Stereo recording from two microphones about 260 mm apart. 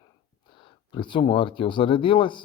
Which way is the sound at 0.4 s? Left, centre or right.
Centre.